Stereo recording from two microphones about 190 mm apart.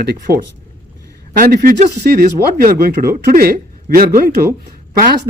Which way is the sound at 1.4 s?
50° right (ahead or behind).